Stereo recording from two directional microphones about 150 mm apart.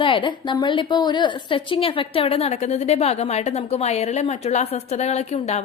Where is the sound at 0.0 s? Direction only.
35° left (ahead or behind).